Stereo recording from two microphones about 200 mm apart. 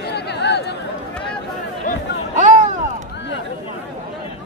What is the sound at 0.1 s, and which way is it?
Chatter, 55° left (ahead or behind).